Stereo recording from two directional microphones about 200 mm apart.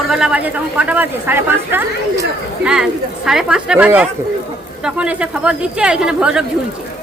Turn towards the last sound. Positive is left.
turn(degrees=-5)  # may be behind; listen again after turning